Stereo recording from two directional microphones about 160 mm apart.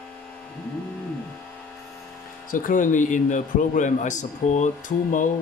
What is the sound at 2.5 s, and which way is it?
A man's voice, 55° left (ahead or behind).